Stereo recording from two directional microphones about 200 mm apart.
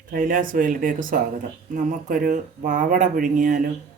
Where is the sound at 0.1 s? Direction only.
40° right (ahead or behind).